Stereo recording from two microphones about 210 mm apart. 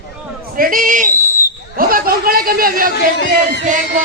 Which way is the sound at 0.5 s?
40° right (ahead or behind).